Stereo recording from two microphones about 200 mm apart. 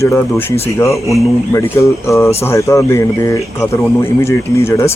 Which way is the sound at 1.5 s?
15° left (ahead or behind).